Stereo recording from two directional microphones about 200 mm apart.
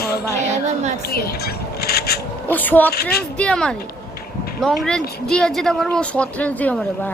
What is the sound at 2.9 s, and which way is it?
Speech, 50° left (ahead or behind).